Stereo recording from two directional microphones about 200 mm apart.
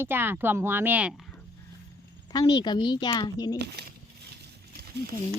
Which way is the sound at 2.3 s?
20° left (ahead or behind).